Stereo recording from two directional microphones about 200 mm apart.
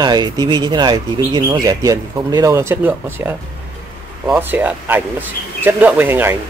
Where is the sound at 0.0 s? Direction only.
20° right (ahead or behind).